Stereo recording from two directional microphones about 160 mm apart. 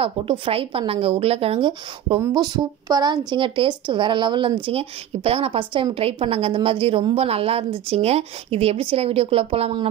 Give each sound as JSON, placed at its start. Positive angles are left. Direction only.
{"t": 0.0, "sound": "a woman's voice", "side_deg": -35}